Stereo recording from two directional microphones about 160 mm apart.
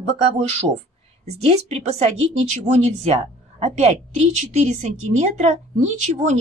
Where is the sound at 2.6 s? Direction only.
45° right (ahead or behind).